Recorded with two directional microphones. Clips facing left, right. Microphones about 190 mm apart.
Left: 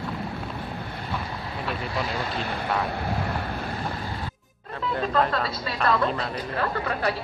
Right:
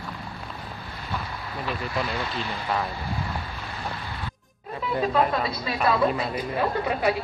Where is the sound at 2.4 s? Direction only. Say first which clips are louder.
Left 2 dB; 55° left (ahead or behind).